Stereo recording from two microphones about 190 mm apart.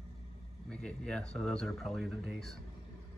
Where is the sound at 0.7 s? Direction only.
5° left (ahead or behind).